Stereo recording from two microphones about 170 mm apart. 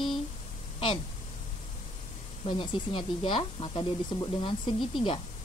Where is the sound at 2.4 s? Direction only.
30° left (ahead or behind).